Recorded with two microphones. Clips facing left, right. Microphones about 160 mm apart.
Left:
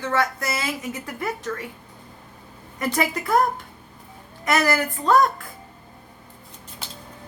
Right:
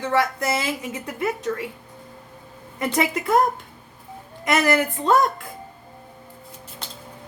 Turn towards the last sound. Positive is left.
turn(degrees=-20)  # may be behind; listen again after turning